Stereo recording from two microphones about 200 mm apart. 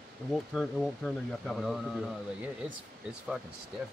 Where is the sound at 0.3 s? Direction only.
Centre (ahead or behind).